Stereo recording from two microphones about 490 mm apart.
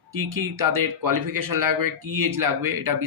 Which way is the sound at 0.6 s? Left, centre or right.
Right.